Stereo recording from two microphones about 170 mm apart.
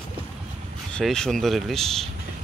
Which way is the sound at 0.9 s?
5° left (ahead or behind).